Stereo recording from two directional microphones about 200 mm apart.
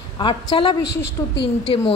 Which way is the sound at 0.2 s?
25° left (ahead or behind).